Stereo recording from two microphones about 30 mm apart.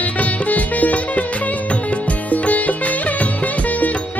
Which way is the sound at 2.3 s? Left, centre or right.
Left.